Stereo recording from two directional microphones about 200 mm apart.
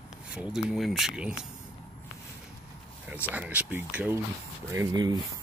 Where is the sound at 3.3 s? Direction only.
5° right (ahead or behind).